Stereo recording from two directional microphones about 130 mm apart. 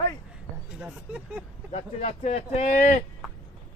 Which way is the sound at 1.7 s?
55° left (ahead or behind).